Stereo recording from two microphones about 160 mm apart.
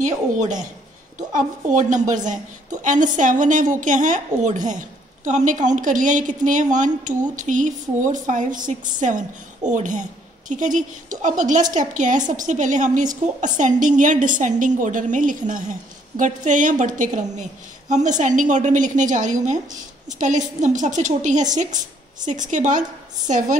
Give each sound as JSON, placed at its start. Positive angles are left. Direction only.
{"t": 0.0, "sound": "a woman's voice", "side_deg": -50}